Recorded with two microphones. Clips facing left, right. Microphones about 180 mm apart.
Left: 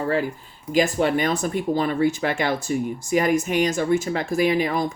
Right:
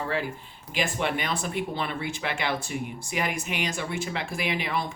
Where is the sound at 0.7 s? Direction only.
40° left (ahead or behind).